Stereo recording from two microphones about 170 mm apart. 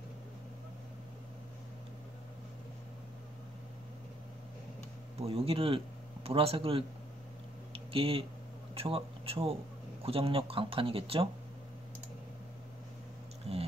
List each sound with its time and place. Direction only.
5.2 s speech: 35° right (ahead or behind)
7.7 s a sound: 30° right (ahead or behind)
8.7 s speech: 35° right (ahead or behind)
13.5 s speech: 35° right (ahead or behind)